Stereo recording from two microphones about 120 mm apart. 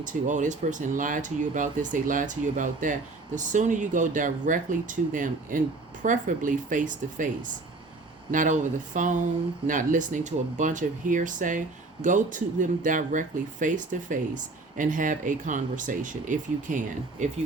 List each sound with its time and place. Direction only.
0.0 s speech: 90° right
8.3 s speech: 90° right